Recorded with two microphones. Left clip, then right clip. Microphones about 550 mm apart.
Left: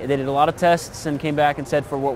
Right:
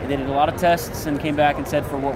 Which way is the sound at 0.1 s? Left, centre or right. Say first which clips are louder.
Left 1 dB; left.